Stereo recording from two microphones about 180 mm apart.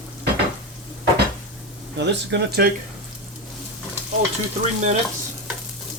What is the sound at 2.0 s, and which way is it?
Speech, 75° right (ahead or behind).